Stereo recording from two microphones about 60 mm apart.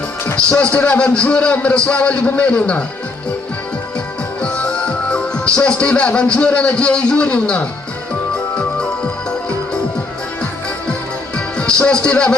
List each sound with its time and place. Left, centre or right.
0.7 s a man's voice: left
0.9 s a man's voice: centre
4.4 s speech: left
11.3 s music: centre